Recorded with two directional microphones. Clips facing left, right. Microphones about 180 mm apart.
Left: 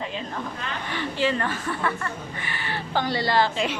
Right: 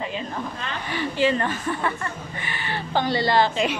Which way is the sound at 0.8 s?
10° right (ahead or behind).